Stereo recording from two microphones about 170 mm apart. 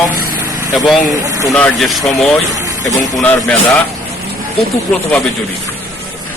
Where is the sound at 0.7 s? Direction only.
Centre (ahead or behind).